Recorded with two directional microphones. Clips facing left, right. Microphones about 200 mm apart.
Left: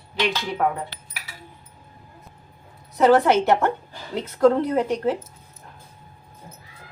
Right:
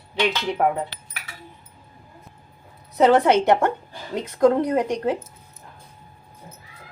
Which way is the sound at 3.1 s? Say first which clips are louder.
Right 1 dB; 15° right (ahead or behind).